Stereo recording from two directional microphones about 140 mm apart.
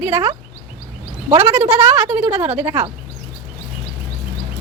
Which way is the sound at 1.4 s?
15° right (ahead or behind).